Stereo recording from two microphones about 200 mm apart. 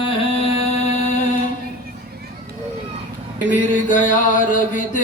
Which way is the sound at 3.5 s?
40° left (ahead or behind).